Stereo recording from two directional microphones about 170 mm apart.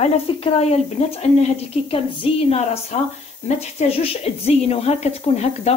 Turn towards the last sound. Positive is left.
turn(degrees=40)  # may be behind; listen again after turning